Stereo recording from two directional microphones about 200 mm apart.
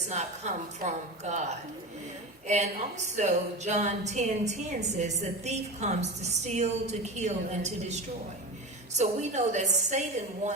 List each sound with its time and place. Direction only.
0.1 s a woman's voice: 35° right (ahead or behind)
3.2 s a woman's voice: 35° right (ahead or behind)
9.0 s a woman's voice: 35° right (ahead or behind)